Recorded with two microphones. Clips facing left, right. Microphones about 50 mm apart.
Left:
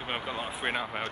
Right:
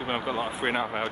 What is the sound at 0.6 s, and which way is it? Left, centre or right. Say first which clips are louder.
Speech: right 3 dB; centre.